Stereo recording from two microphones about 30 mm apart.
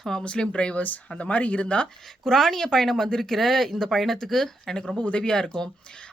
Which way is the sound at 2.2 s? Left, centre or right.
Centre.